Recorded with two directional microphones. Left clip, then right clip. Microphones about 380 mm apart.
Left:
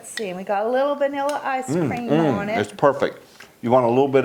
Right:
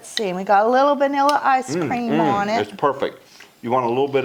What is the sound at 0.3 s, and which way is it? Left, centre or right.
Speech, right.